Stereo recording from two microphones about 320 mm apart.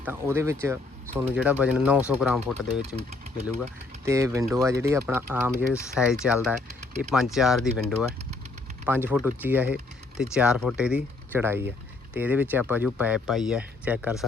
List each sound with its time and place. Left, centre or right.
0.0 s speech: centre
2.8 s speech: centre
4.0 s speech: centre